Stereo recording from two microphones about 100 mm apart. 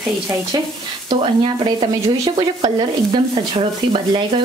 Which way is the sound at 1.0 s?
55° right (ahead or behind).